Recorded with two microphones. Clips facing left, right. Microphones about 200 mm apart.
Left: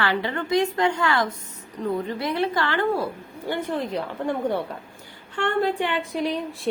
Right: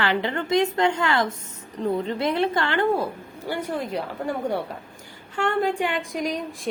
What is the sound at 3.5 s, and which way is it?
A woman's voice, 10° right (ahead or behind).